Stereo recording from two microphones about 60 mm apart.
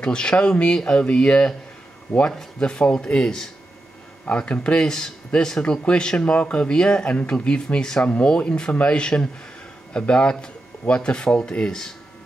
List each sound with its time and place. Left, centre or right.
0.0 s speech: centre